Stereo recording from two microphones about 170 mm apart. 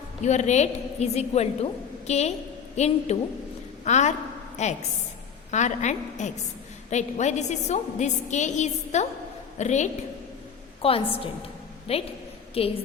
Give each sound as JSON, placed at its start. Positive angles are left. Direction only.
{"t": 0.2, "sound": "a woman's voice", "side_deg": 45}
{"t": 10.8, "sound": "a woman's voice", "side_deg": 35}